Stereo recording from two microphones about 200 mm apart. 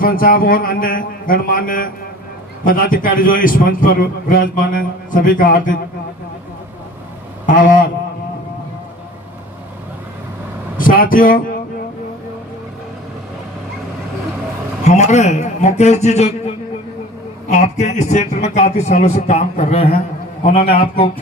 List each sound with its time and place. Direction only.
0.0 s a man's voice: 45° left (ahead or behind)
7.4 s a man's voice: 40° left (ahead or behind)
10.8 s speech: 45° left (ahead or behind)
14.8 s a man's voice: 35° left (ahead or behind)
17.5 s a man's voice: 35° left (ahead or behind)